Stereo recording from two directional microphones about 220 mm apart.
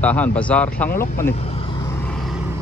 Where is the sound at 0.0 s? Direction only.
5° left (ahead or behind).